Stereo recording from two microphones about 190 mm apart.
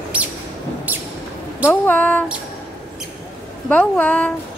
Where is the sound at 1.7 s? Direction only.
10° left (ahead or behind).